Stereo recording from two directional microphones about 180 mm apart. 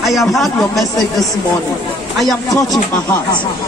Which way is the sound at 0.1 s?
Centre (ahead or behind).